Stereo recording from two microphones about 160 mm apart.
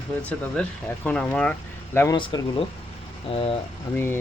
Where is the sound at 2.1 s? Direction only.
30° left (ahead or behind).